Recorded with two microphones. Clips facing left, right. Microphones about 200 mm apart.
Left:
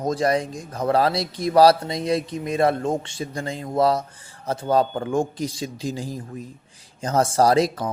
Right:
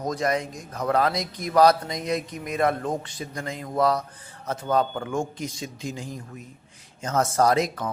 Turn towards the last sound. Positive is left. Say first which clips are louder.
# left 3 dB
turn(degrees=35)  # may be behind; listen again after turning